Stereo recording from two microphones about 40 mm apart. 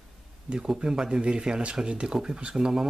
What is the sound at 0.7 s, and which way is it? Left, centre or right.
Speech, centre.